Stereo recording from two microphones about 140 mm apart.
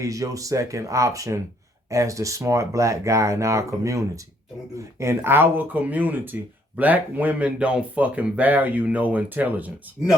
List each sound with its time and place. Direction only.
0.0 s speech: 25° right (ahead or behind); by 10.2 s 5° right (ahead or behind)